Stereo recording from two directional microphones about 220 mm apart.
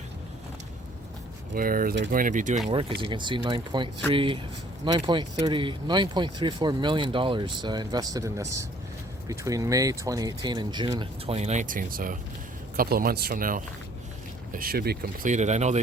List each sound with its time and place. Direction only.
1.5 s speech: 40° right (ahead or behind)
2.2 s speech: 35° right (ahead or behind)